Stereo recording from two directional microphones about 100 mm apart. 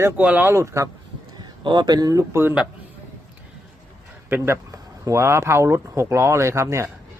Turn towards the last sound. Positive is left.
turn(degrees=-30)  # may be behind; listen again after turning